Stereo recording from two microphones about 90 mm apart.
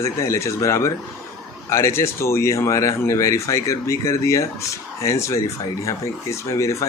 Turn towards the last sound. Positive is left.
turn(degrees=35)  # may be behind; listen again after turning